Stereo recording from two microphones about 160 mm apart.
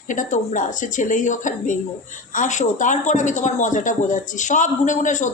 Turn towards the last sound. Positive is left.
turn(degrees=50)  # may be behind; listen again after turning